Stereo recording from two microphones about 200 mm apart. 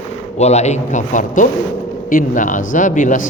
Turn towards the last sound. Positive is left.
turn(degrees=40)  # may be behind; listen again after turning